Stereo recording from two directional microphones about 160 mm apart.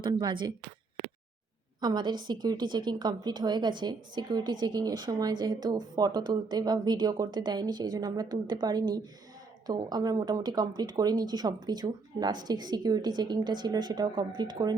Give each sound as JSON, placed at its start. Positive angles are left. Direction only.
{"t": 0.0, "sound": "a woman's voice", "side_deg": -25}
{"t": 1.8, "sound": "a woman's voice", "side_deg": -25}